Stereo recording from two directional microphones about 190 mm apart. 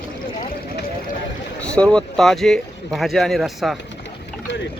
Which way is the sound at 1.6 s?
5° left (ahead or behind).